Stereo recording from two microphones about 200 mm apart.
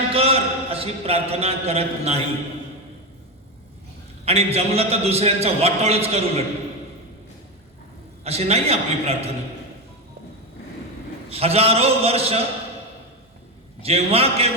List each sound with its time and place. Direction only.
0.1 s a man's voice: 30° right (ahead or behind)
4.3 s a man's voice: 30° right (ahead or behind)
8.2 s a man's voice: 30° right (ahead or behind)
11.3 s a man's voice: 30° right (ahead or behind)
13.8 s a man's voice: 30° right (ahead or behind)